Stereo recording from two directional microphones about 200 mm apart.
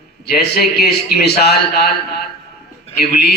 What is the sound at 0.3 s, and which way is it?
A man's voice, 50° left (ahead or behind).